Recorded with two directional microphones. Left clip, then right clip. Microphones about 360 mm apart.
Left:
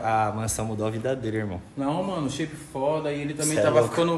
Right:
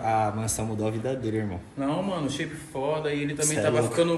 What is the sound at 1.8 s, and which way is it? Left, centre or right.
Speech, left.